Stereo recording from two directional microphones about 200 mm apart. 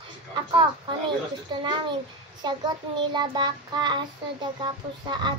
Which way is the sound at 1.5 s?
20° right (ahead or behind).